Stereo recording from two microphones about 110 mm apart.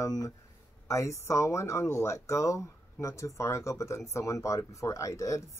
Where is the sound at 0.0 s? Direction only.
30° left (ahead or behind).